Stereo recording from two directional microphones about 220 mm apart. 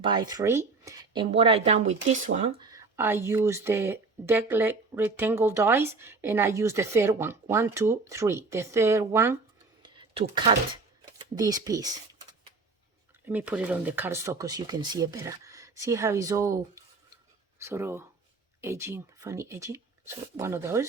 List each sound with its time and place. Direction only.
0.0 s speech: 20° right (ahead or behind)
2.6 s speech: 15° right (ahead or behind)
9.8 s a sound: 20° right (ahead or behind)
11.2 s speech: 15° right (ahead or behind)
13.2 s speech: 5° right (ahead or behind)